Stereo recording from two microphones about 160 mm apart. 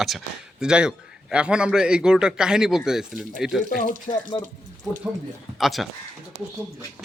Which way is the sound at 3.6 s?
65° left (ahead or behind).